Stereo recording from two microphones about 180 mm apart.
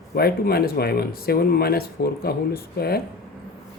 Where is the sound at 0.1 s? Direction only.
60° left (ahead or behind).